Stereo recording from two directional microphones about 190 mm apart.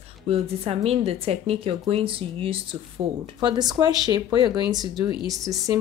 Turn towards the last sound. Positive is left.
turn(degrees=-20)  # may be behind; listen again after turning